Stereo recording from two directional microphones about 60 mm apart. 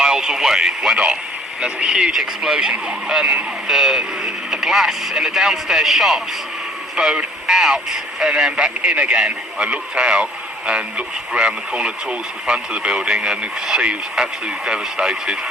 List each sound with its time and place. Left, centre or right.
0.0 s speech: centre
6.9 s speech: centre